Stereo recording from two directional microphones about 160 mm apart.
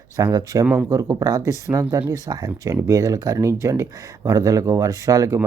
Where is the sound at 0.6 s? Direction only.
10° right (ahead or behind).